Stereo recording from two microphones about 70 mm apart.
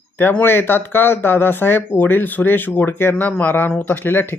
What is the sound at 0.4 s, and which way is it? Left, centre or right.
Speech, left.